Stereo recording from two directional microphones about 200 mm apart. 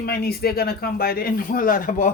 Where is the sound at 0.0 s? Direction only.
50° left (ahead or behind).